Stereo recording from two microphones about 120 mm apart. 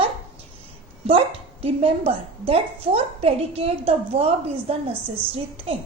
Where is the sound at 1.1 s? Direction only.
50° right (ahead or behind).